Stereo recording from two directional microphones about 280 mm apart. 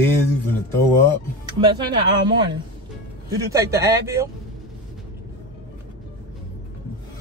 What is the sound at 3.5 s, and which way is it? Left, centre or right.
Speech, centre.